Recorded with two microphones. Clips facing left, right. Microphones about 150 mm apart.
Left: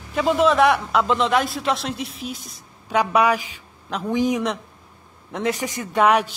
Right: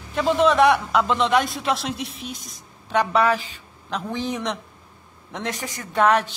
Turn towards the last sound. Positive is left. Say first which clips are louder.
# left 1 dB
turn(degrees=10)  # may be behind; listen again after turning